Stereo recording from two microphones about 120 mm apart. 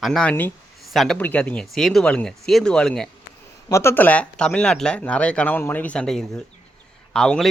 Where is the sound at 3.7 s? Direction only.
20° left (ahead or behind).